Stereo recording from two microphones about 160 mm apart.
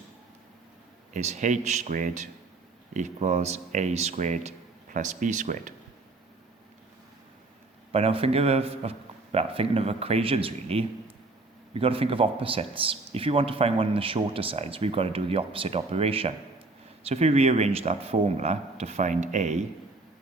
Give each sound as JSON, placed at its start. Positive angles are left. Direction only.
{"t": 1.1, "sound": "speech", "side_deg": -50}
{"t": 7.9, "sound": "speech", "side_deg": -40}